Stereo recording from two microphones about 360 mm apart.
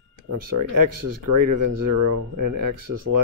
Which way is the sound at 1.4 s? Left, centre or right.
Right.